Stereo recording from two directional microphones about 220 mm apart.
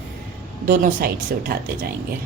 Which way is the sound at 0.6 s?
40° right (ahead or behind).